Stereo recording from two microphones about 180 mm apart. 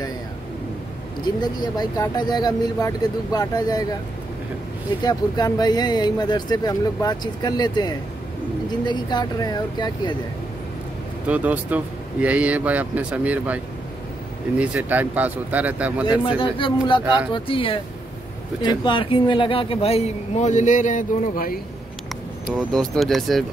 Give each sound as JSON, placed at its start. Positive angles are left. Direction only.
{"t": 1.2, "sound": "speech", "side_deg": 25}
{"t": 5.0, "sound": "speech", "side_deg": 20}
{"t": 11.2, "sound": "speech", "side_deg": -10}
{"t": 14.6, "sound": "speech", "side_deg": -10}
{"t": 16.3, "sound": "speech", "side_deg": 30}
{"t": 22.6, "sound": "speech", "side_deg": 0}